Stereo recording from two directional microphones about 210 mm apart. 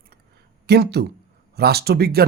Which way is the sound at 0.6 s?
50° right (ahead or behind).